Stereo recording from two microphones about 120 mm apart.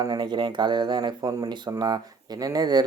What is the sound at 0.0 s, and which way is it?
Speech, 35° right (ahead or behind).